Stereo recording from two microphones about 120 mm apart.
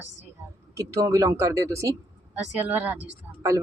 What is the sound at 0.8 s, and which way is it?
Speech, 25° right (ahead or behind).